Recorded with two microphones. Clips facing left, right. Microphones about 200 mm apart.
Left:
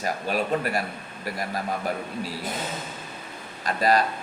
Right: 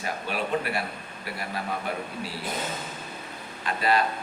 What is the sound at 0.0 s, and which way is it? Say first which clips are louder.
A man's voice: left 4 dB; 40° left (ahead or behind).